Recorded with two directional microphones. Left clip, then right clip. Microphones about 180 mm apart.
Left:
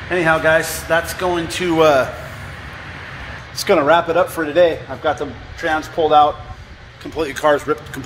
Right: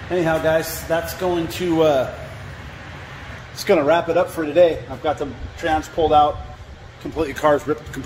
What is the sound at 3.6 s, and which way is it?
Speech, centre (ahead or behind).